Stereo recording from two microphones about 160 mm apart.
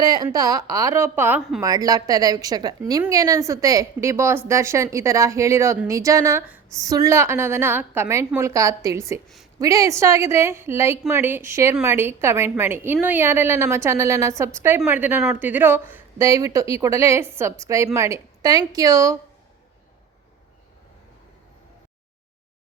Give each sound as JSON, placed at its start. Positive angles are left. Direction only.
{"t": 0.0, "sound": "a woman's voice", "side_deg": -25}